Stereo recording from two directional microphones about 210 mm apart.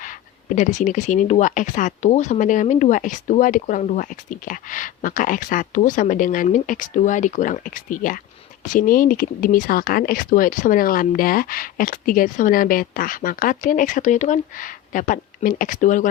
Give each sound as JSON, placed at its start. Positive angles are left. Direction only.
{"t": 0.0, "sound": "speech", "side_deg": 35}